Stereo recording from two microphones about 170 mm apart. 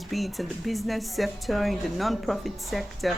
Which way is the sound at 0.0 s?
Centre (ahead or behind).